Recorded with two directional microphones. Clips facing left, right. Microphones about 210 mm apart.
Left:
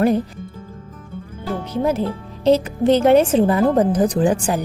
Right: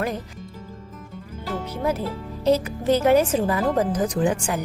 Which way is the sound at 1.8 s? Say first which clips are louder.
Left 6 dB; 30° left (ahead or behind).